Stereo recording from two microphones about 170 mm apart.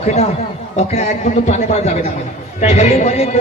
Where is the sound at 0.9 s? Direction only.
40° left (ahead or behind).